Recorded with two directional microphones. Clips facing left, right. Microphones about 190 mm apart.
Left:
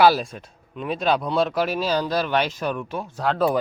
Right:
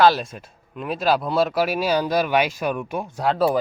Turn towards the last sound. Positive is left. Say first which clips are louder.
# right 1 dB
turn(degrees=-10)  # may be behind; listen again after turning